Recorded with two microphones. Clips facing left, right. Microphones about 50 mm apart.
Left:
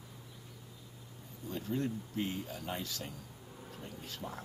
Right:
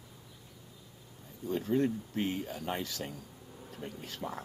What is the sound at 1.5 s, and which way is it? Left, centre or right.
Speech, right.